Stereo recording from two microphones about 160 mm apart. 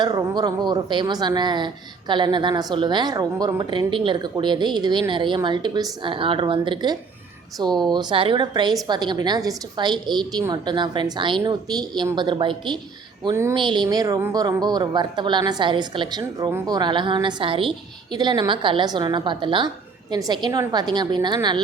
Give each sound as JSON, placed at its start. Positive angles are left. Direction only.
{"t": 0.0, "sound": "speech", "side_deg": -25}